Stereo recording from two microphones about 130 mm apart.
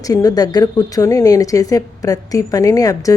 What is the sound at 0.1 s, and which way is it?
Speech, 30° left (ahead or behind).